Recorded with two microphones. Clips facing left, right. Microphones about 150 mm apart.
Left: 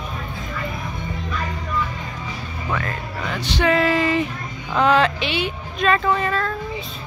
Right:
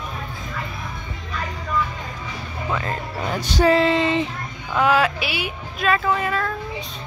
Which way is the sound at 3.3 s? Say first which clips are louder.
Right 2 dB; 40° right (ahead or behind).